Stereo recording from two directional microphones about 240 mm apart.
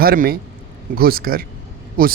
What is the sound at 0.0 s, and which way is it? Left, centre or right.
Speech, right.